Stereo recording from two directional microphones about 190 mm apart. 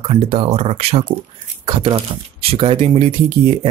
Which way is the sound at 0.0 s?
30° right (ahead or behind).